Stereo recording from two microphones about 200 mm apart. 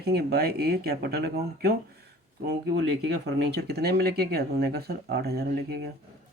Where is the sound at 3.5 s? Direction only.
55° right (ahead or behind).